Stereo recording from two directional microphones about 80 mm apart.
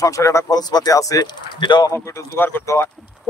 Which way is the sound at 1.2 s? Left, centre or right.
Left.